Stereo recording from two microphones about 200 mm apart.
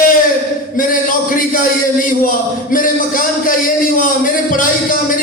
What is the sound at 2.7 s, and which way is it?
Music, 45° left (ahead or behind).